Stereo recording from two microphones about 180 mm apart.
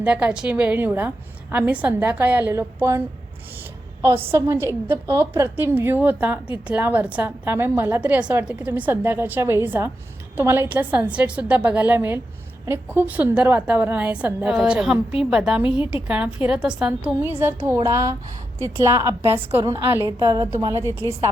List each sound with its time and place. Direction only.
0.0 s a woman's voice: 10° right (ahead or behind)
4.3 s a woman's voice: 15° right (ahead or behind)